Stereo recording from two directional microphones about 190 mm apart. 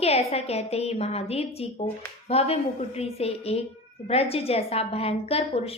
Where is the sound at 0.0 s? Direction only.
30° left (ahead or behind).